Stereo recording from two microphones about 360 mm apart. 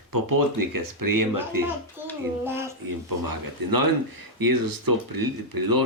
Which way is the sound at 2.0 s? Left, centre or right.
Centre.